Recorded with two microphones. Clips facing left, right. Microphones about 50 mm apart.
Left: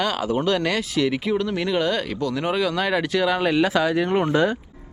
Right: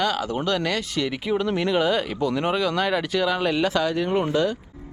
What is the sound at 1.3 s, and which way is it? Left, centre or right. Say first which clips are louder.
Speech: even; centre.